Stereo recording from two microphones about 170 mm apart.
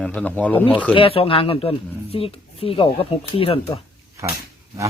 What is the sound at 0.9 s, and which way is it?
Speech, 35° left (ahead or behind).